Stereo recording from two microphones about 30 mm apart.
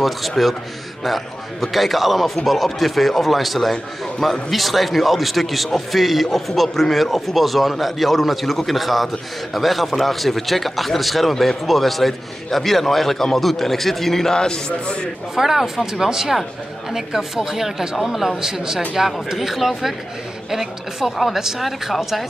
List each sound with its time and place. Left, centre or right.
0.4 s a man's voice: centre
14.3 s speech: left
15.3 s a man's voice: centre
18.4 s a man's voice: centre